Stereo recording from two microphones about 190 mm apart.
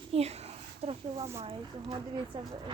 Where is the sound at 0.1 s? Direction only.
35° right (ahead or behind).